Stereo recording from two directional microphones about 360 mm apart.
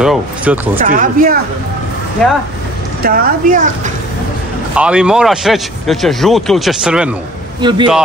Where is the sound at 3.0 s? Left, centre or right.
Right.